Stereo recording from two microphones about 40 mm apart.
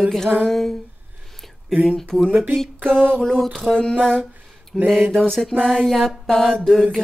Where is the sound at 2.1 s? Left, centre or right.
Right.